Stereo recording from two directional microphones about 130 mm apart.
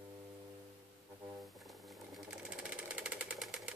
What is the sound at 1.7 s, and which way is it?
Sewing machine, centre (ahead or behind).